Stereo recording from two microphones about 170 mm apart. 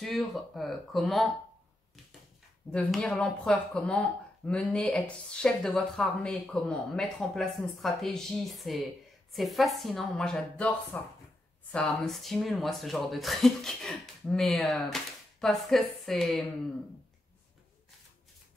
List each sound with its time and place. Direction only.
0.0 s speech: centre (ahead or behind)
2.7 s speech: 5° left (ahead or behind)